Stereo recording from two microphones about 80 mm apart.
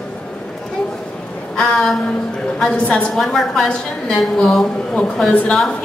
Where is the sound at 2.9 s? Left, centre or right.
Centre.